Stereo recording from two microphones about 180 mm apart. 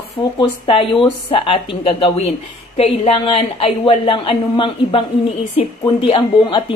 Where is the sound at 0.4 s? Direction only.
30° left (ahead or behind).